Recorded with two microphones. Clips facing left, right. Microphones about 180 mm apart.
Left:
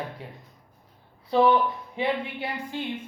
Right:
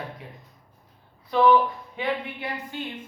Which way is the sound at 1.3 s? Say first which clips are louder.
Right 1 dB; 25° left (ahead or behind).